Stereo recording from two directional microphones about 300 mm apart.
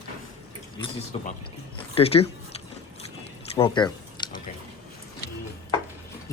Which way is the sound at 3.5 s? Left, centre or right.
Centre.